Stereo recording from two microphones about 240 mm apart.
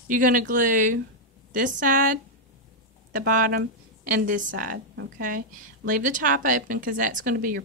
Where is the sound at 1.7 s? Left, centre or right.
Right.